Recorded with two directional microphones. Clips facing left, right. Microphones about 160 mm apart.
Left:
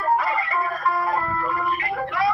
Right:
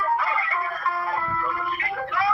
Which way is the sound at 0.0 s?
35° left (ahead or behind).